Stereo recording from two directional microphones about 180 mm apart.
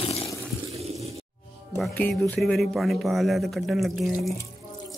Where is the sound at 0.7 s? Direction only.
35° right (ahead or behind).